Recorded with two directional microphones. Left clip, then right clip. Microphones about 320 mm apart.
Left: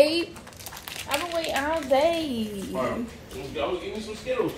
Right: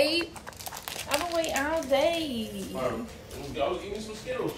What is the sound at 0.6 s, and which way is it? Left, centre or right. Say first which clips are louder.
Crumpling: left 1 dB; right.